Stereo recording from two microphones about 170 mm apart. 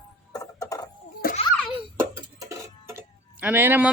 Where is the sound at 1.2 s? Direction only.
60° left (ahead or behind).